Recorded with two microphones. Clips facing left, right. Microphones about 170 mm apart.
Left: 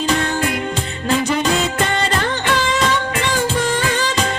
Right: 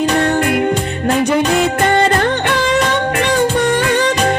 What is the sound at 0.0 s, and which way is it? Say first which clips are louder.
Music: right 5 dB; 60° right (ahead or behind).